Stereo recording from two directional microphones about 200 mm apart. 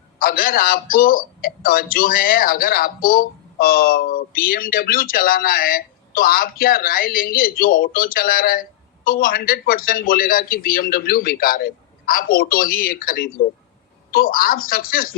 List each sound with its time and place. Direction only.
0.2 s a man's voice: 45° left (ahead or behind)